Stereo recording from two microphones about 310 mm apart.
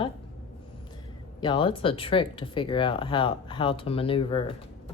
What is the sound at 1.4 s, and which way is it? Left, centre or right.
Speech, centre.